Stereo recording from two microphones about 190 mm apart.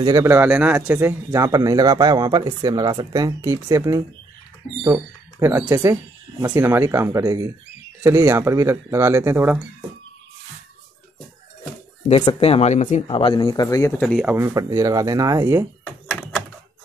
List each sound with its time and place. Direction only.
0.0 s a man's voice: 15° right (ahead or behind)
12.1 s speech: 30° left (ahead or behind)
14.2 s a man's voice: 15° right (ahead or behind)